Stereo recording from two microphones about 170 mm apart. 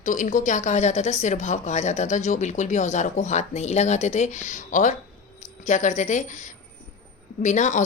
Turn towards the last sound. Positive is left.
turn(degrees=45)  # may be behind; listen again after turning